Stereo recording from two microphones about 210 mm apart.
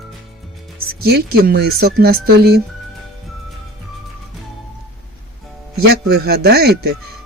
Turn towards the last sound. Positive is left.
turn(degrees=-50)  # may be behind; listen again after turning